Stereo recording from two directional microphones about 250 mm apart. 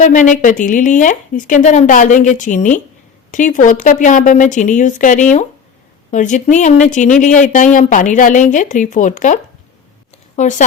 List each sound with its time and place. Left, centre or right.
0.0 s a woman's voice: left